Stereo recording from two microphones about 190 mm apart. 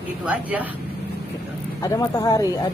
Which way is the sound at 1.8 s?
20° left (ahead or behind).